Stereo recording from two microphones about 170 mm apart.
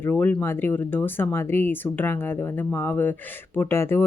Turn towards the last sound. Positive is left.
turn(degrees=15)  # may be behind; listen again after turning